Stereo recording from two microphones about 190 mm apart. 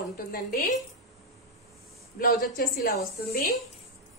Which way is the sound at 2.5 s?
45° left (ahead or behind).